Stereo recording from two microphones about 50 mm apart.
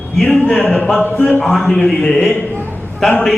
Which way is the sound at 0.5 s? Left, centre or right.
Left.